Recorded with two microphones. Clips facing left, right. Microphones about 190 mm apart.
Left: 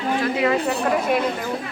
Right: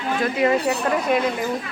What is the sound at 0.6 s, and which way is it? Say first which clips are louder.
Speech: even; centre (ahead or behind).